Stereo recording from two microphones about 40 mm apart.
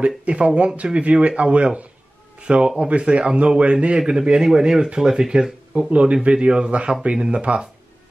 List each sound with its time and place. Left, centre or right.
0.0 s a man's voice: right
5.8 s a man's voice: right